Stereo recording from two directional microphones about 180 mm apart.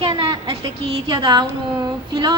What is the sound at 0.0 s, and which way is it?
A woman's voice, 30° right (ahead or behind).